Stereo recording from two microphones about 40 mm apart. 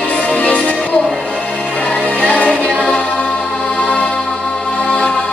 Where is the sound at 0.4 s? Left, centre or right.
Left.